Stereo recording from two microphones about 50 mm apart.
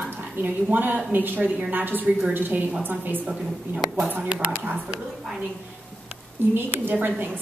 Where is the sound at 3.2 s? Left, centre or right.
Right.